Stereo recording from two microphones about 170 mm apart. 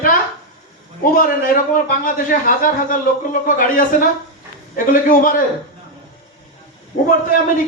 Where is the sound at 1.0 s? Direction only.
55° left (ahead or behind).